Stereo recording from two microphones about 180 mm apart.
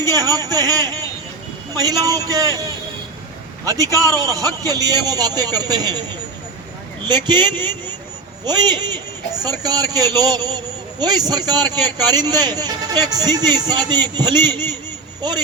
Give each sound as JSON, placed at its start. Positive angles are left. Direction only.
{"t": 0.0, "sound": "a man's voice", "side_deg": -20}
{"t": 4.2, "sound": "a man's voice", "side_deg": -20}
{"t": 7.1, "sound": "a man's voice", "side_deg": -25}
{"t": 7.4, "sound": "speech", "side_deg": 10}
{"t": 8.4, "sound": "a man's voice", "side_deg": -25}